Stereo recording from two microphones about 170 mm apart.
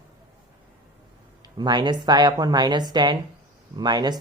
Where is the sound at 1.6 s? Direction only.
25° right (ahead or behind).